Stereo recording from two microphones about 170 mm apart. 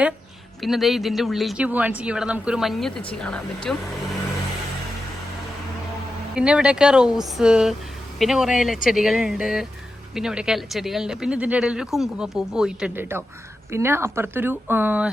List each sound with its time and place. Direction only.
0.6 s speech: centre (ahead or behind)
6.3 s speech: 5° right (ahead or behind)